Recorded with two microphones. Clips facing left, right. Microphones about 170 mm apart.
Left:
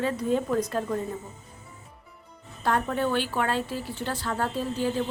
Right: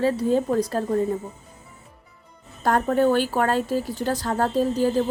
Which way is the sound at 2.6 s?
45° right (ahead or behind).